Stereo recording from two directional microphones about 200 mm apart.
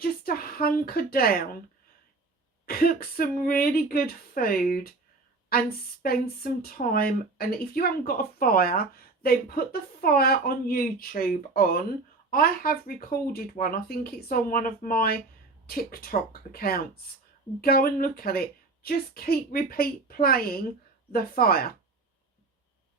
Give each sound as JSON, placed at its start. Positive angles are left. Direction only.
{"t": 0.0, "sound": "a woman's voice", "side_deg": 50}
{"t": 2.6, "sound": "speech", "side_deg": 45}